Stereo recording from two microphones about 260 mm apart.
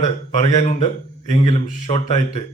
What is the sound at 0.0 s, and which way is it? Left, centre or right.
A man's voice, left.